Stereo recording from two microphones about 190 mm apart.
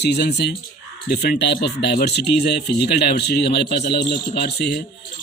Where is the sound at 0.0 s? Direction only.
60° left (ahead or behind).